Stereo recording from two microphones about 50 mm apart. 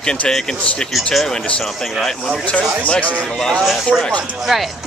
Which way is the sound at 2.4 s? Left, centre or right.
Left.